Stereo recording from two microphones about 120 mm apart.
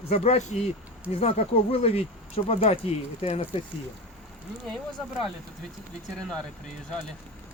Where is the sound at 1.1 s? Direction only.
60° left (ahead or behind).